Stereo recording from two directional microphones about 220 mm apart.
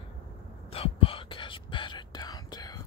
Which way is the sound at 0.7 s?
25° left (ahead or behind).